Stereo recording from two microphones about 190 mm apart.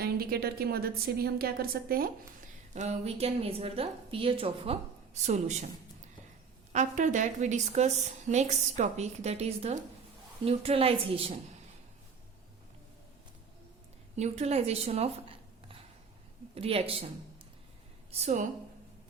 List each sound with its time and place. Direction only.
0.0 s a woman's voice: 55° right (ahead or behind)
2.7 s a woman's voice: 35° right (ahead or behind)
6.7 s a woman's voice: 40° right (ahead or behind)
14.2 s a woman's voice: 35° right (ahead or behind)
18.1 s a woman's voice: 40° right (ahead or behind)